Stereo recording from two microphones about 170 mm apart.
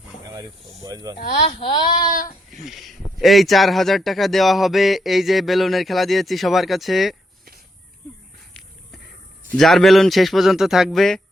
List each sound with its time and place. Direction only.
0.3 s speech: 20° right (ahead or behind)
1.5 s speech: 35° left (ahead or behind)
2.0 s speech: 55° left (ahead or behind)
2.5 s speech: centre (ahead or behind)
9.6 s speech: centre (ahead or behind)